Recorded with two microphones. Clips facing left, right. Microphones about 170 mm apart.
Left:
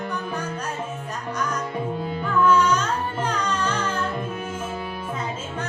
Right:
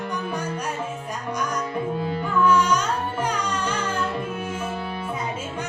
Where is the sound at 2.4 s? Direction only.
10° right (ahead or behind).